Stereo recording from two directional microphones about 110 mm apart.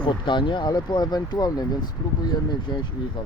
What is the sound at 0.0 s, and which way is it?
Speech, 45° left (ahead or behind).